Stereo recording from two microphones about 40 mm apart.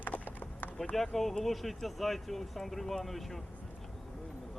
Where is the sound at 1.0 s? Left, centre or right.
Centre.